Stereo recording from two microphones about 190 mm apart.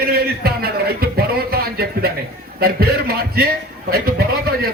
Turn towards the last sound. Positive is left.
turn(degrees=-55)  # may be behind; listen again after turning